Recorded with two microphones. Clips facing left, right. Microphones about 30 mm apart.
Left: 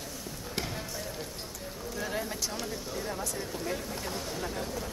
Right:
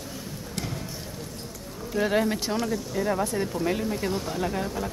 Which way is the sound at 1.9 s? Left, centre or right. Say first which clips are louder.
Right 11 dB; right.